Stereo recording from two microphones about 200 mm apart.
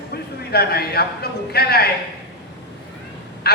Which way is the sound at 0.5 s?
50° left (ahead or behind).